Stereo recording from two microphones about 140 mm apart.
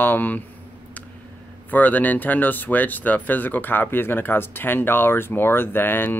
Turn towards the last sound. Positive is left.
turn(degrees=15)  # may be behind; listen again after turning